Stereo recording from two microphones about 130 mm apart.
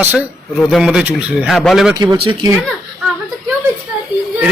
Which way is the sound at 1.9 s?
30° right (ahead or behind).